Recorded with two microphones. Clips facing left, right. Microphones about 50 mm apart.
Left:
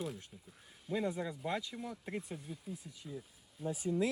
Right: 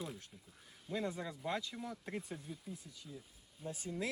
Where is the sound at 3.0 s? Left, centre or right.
Left.